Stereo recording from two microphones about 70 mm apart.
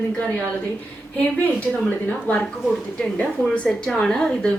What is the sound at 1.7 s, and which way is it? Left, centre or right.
Speech, left.